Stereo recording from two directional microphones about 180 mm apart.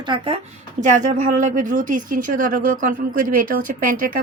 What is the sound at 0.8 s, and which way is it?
A woman's voice, 45° right (ahead or behind).